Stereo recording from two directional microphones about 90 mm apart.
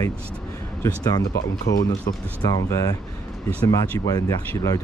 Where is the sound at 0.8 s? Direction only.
50° left (ahead or behind).